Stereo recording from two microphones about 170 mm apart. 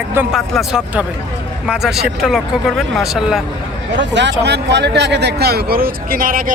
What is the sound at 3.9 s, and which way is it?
Speech, 90° right.